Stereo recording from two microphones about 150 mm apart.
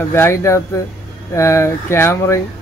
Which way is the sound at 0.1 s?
15° left (ahead or behind).